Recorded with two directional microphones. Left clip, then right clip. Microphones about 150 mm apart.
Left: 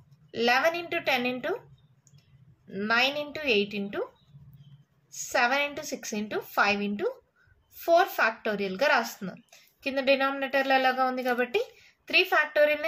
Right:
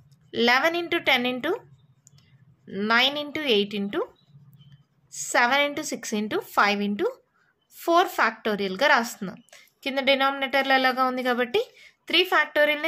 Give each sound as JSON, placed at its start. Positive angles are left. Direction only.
{"t": 0.3, "sound": "speech", "side_deg": -50}
{"t": 2.7, "sound": "speech", "side_deg": -45}
{"t": 5.1, "sound": "speech", "side_deg": -50}